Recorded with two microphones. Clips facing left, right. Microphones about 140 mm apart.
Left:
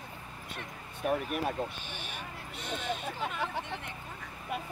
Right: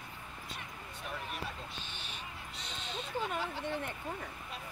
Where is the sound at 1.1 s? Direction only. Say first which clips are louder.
Left 11 dB; 60° left (ahead or behind).